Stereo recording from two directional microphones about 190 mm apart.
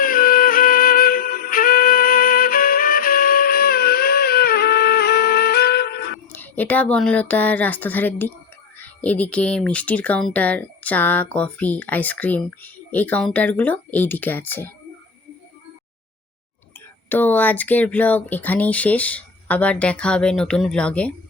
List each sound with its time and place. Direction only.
0.0 s music: 50° left (ahead or behind)
6.3 s speech: 10° left (ahead or behind)
17.1 s speech: 10° left (ahead or behind)